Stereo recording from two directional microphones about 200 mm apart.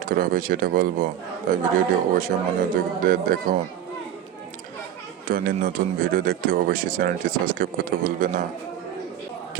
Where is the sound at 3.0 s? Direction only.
45° right (ahead or behind).